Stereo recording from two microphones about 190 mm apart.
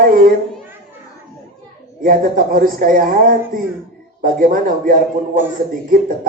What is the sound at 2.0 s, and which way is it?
A man's voice, 50° right (ahead or behind).